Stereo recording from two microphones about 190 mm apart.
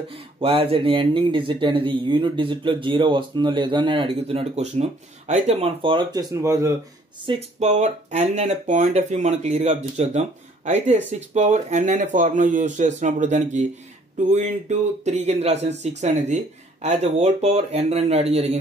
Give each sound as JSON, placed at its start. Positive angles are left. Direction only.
{"t": 0.1, "sound": "speech", "side_deg": -30}
{"t": 7.2, "sound": "speech", "side_deg": -35}